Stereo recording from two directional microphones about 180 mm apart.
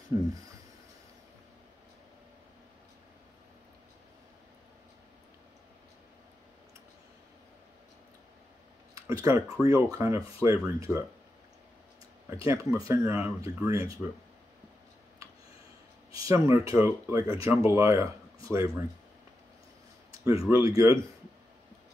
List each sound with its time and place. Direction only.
0.1 s speech: 15° right (ahead or behind)
9.0 s speech: 15° right (ahead or behind)
12.3 s speech: 15° right (ahead or behind)
16.3 s speech: 15° right (ahead or behind)
20.1 s speech: 15° right (ahead or behind)